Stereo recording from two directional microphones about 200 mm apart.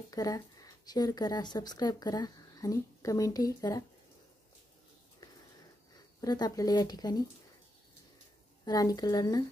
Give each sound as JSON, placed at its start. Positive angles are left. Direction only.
{"t": 0.1, "sound": "speech", "side_deg": 15}
{"t": 6.2, "sound": "speech", "side_deg": 20}
{"t": 8.6, "sound": "speech", "side_deg": 20}